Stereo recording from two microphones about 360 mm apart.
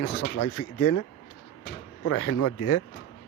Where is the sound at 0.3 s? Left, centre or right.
Left.